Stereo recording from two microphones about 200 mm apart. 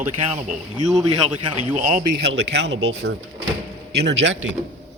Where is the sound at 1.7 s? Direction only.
35° right (ahead or behind).